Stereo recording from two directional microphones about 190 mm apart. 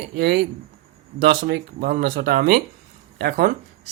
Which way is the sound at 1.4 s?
60° right (ahead or behind).